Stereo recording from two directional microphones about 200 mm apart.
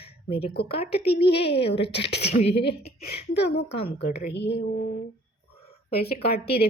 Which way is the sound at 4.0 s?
55° left (ahead or behind).